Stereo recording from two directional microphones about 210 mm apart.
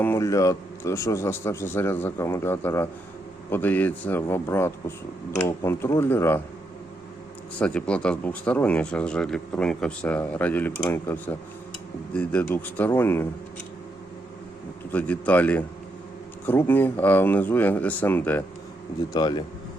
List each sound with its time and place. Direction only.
0.0 s a man's voice: 15° left (ahead or behind)
7.6 s a man's voice: 5° left (ahead or behind)
14.9 s a man's voice: 5° left (ahead or behind)
19.1 s speech: 20° left (ahead or behind)